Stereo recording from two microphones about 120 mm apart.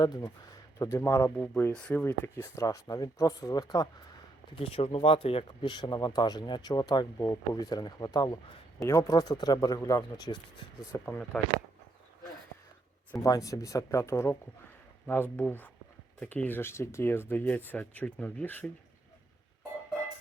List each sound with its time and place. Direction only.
0.0 s speech: 35° left (ahead or behind)
0.8 s speech: 25° left (ahead or behind)
4.5 s speech: 50° left (ahead or behind); by 10.4 s 35° left (ahead or behind)
10.9 s speech: 15° left (ahead or behind)
13.1 s speech: 30° left (ahead or behind); by 18.7 s 10° left (ahead or behind)